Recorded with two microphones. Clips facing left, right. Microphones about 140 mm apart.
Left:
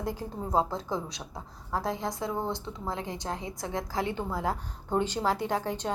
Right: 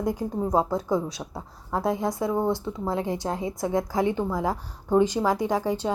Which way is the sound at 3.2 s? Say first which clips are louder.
Right 7 dB; 20° right (ahead or behind).